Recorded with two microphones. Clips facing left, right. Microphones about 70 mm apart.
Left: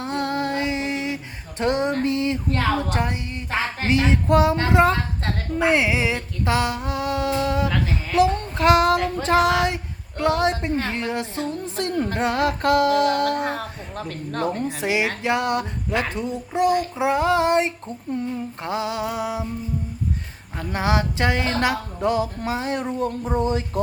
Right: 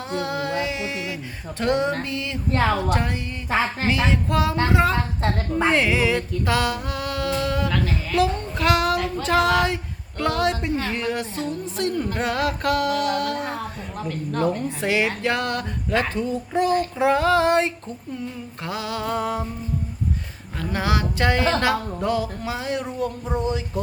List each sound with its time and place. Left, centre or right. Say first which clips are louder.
0.0 s a sound: left 2 dB; left
2.0 s a woman's voice: left 7 dB; left
3.0 s speech: left 1 dB; centre
5.7 s music: right 1 dB; centre
8.5 s female singing: left 4 dB; left
10.8 s a woman's voice: even; left
13.4 s a woman's voice: left 2 dB; left
14.8 s speech: even; centre
19.1 s speech: right 2 dB; centre
20.6 s speech: left 1 dB; left
23.4 s a woman's voice: left 3 dB; left